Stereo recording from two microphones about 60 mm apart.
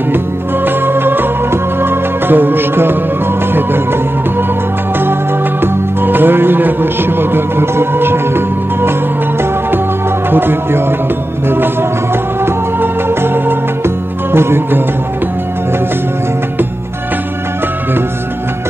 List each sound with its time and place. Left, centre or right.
0.7 s music: right
5.6 s speech: right
10.3 s speech: right
11.4 s music: right